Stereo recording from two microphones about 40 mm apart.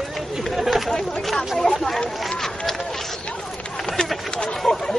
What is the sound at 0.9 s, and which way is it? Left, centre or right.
Speech, centre.